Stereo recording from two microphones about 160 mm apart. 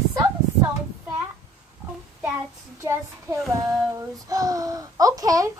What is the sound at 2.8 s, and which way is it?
A child's voice, 15° right (ahead or behind).